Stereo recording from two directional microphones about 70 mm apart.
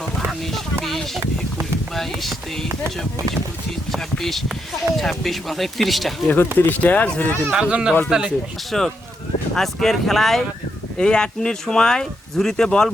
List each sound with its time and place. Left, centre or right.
0.8 s a sound: centre
3.9 s speech: centre
6.2 s speech: left
7.5 s speech: centre
8.7 s speech: centre